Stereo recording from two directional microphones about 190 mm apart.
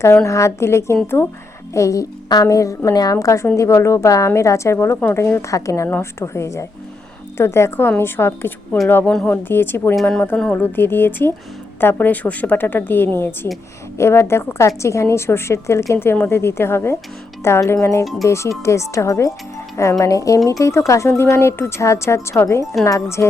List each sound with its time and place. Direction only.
0.3 s a woman's voice: 15° left (ahead or behind)